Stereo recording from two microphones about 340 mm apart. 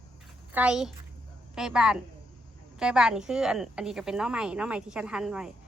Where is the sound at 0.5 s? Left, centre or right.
Centre.